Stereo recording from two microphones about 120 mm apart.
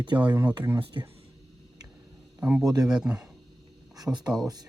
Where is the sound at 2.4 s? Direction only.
10° right (ahead or behind).